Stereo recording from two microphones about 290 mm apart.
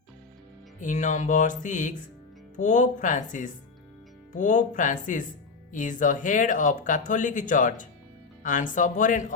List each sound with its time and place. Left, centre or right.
0.8 s speech: left